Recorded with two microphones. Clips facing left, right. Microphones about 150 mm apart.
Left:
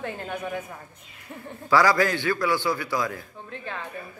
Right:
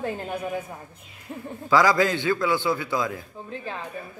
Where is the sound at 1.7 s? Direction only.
20° right (ahead or behind).